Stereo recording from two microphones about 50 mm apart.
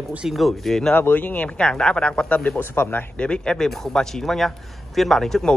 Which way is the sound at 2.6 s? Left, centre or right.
Left.